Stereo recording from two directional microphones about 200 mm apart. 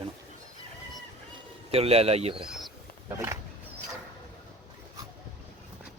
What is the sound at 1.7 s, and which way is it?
Speech, 30° right (ahead or behind).